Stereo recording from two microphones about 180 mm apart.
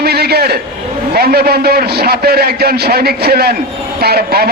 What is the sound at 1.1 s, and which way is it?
A man's voice, 60° right (ahead or behind).